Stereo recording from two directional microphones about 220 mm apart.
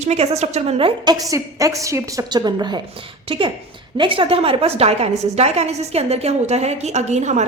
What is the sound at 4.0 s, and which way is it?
A woman's voice, 25° right (ahead or behind).